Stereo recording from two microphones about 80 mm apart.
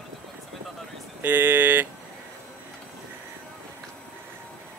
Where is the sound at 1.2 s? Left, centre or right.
Right.